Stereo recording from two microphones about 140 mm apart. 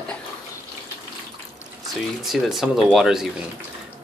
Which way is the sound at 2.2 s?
Centre (ahead or behind).